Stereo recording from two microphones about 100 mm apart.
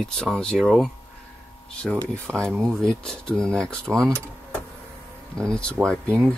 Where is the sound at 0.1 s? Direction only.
5° left (ahead or behind).